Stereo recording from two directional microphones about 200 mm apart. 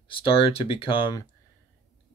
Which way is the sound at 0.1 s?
25° left (ahead or behind).